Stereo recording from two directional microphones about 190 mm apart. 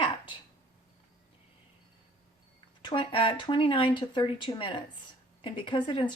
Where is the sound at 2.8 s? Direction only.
25° left (ahead or behind).